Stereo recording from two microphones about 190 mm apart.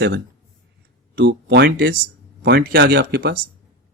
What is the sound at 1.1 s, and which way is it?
Speech, 65° right (ahead or behind).